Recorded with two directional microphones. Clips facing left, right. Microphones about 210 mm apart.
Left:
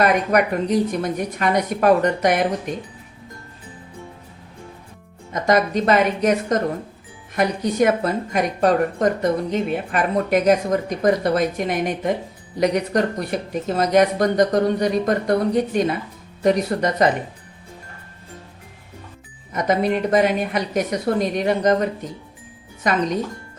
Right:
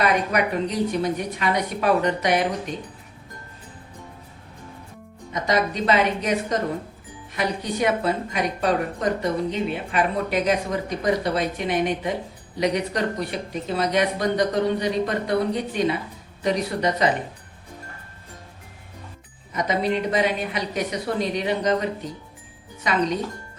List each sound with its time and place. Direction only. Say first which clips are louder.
0.0 s speech: left 4 dB; 45° left (ahead or behind)
5.3 s speech: left 5 dB; 50° left (ahead or behind)
19.5 s speech: left 3 dB; 50° left (ahead or behind)